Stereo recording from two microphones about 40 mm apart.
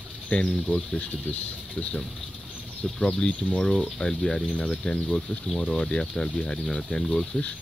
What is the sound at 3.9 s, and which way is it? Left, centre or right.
Speech, centre.